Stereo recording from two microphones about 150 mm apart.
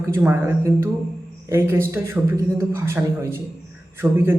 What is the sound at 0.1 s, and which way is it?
A man's voice, 15° right (ahead or behind).